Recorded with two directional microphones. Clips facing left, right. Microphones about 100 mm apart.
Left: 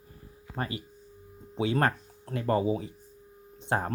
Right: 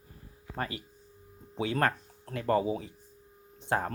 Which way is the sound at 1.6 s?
20° left (ahead or behind).